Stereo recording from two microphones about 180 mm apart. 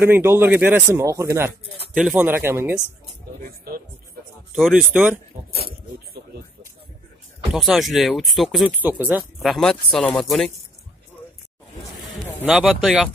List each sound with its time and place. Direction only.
0.0 s speech: 15° right (ahead or behind)
2.0 s speech: 5° right (ahead or behind)
3.4 s a man's voice: 55° right (ahead or behind)
4.6 s speech: centre (ahead or behind)
7.5 s speech: centre (ahead or behind)
12.4 s speech: 5° right (ahead or behind)